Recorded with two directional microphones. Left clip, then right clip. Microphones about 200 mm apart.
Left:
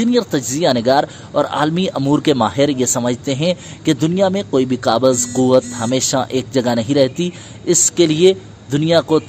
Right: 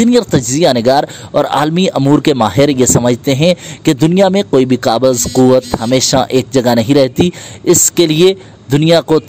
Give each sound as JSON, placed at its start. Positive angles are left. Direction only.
{"t": 0.0, "sound": "speech", "side_deg": -35}